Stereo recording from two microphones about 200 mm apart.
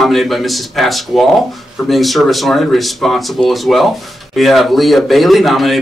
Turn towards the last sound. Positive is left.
turn(degrees=0)  # may be behind; listen again after turning